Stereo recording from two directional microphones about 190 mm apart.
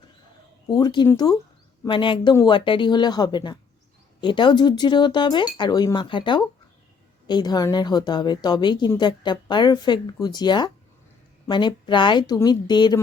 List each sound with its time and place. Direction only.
0.7 s a woman's voice: 25° left (ahead or behind)